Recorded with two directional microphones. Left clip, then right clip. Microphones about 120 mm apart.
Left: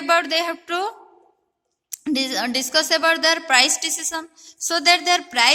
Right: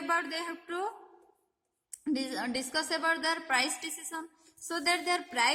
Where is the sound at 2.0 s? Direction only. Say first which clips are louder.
Left 11 dB; 15° left (ahead or behind).